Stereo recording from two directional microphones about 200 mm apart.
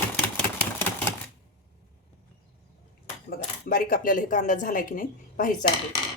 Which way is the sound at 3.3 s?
45° left (ahead or behind).